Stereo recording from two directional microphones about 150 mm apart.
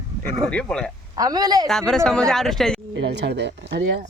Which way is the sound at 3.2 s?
90° right.